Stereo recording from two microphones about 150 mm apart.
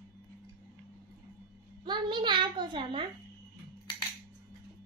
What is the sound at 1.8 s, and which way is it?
A child's voice, 30° right (ahead or behind).